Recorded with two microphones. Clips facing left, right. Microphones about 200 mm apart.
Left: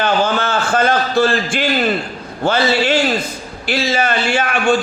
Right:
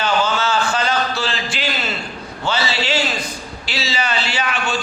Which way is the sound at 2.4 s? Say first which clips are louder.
Left 7 dB; 50° left (ahead or behind).